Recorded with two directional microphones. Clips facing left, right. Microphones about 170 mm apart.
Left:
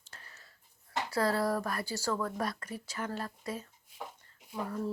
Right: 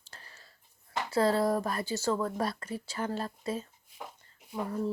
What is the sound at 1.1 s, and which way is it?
A woman's voice, 25° right (ahead or behind).